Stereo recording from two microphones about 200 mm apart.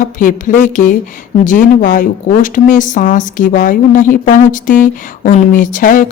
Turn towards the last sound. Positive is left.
turn(degrees=40)  # may be behind; listen again after turning